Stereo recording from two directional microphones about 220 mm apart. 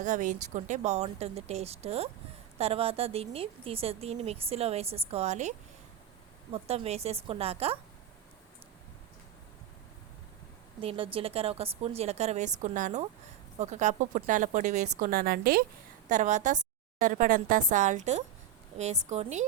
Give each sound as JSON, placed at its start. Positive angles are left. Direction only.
{"t": 0.0, "sound": "a woman's voice", "side_deg": -35}
{"t": 10.8, "sound": "a woman's voice", "side_deg": -25}